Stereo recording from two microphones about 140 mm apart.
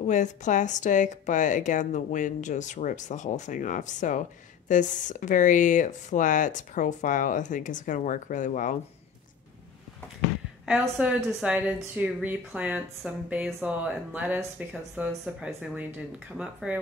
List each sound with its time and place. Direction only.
0.0 s a woman's voice: 60° left (ahead or behind)
10.6 s a woman's voice: 5° right (ahead or behind)